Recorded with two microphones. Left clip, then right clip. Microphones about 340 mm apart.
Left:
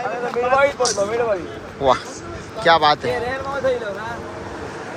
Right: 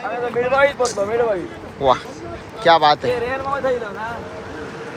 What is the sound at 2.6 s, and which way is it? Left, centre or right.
Speech, centre.